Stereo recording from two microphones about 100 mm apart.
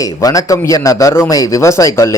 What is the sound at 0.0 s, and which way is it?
Speech, 35° left (ahead or behind).